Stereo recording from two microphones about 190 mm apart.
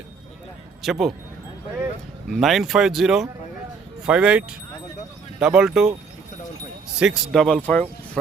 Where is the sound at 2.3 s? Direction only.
Centre (ahead or behind).